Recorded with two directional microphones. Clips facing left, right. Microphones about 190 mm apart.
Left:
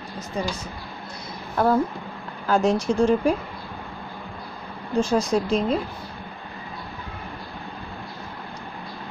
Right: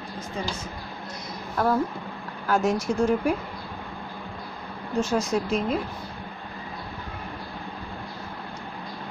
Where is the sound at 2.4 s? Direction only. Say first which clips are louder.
Left 3 dB; 30° left (ahead or behind).